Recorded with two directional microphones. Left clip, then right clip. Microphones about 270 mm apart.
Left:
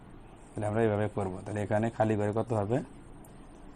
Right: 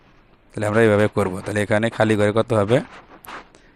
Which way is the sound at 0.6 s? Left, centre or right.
Right.